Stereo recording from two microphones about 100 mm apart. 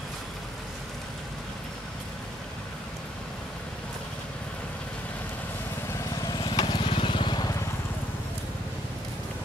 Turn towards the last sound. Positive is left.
turn(degrees=50)  # may be behind; listen again after turning